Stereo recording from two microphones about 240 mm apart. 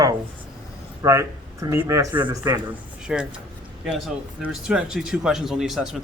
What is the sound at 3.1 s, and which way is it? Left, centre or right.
Speech, centre.